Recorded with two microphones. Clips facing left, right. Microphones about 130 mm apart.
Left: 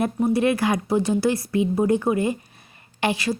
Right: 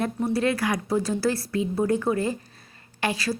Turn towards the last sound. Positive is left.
turn(degrees=25)  # may be behind; listen again after turning